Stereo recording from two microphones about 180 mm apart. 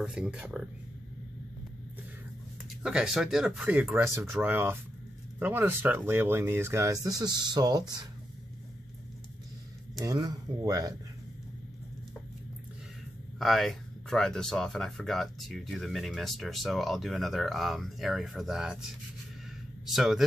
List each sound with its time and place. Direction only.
0.0 s speech: 5° right (ahead or behind)
2.8 s speech: 5° right (ahead or behind); by 8.1 s 20° right (ahead or behind)
10.0 s speech: 20° right (ahead or behind)
13.4 s speech: centre (ahead or behind)